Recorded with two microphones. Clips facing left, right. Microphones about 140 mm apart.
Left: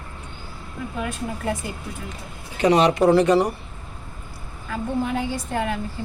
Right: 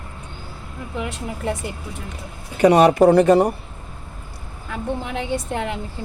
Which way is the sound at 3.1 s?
50° right (ahead or behind).